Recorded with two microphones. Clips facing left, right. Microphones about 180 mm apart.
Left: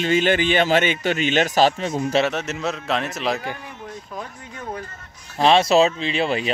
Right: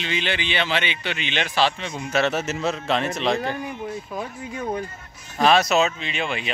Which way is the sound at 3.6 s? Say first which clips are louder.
Right 6 dB; 10° right (ahead or behind).